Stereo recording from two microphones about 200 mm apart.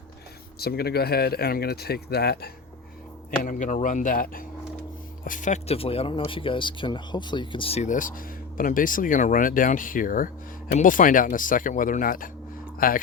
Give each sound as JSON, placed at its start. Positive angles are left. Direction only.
{"t": 0.6, "sound": "speech", "side_deg": 50}
{"t": 3.4, "sound": "speech", "side_deg": 40}